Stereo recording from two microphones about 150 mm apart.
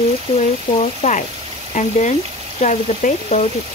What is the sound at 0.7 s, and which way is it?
Speech, 50° left (ahead or behind).